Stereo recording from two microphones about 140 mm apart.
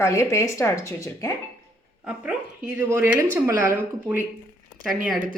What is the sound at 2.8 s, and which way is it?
Speech, 20° right (ahead or behind).